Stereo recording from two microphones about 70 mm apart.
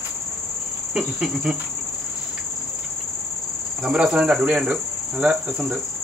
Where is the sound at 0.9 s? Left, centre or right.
Centre.